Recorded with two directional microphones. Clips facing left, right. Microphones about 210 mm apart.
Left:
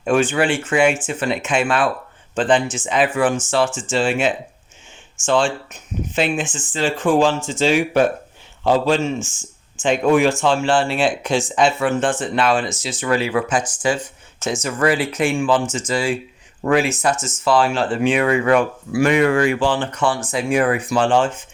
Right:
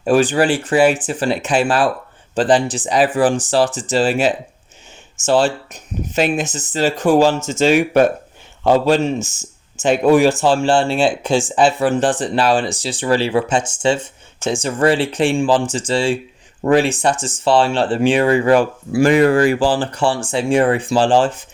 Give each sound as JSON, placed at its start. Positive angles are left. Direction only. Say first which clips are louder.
{"t": 0.0, "sound": "speech", "louder": "right 3 dB", "side_deg": -35}